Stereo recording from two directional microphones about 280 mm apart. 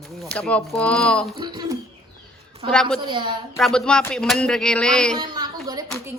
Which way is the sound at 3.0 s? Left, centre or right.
Centre.